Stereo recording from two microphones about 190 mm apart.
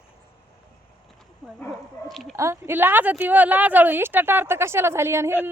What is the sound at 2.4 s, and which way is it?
A woman's voice, 15° right (ahead or behind).